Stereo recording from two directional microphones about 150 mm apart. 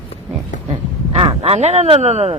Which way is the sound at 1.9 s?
45° right (ahead or behind).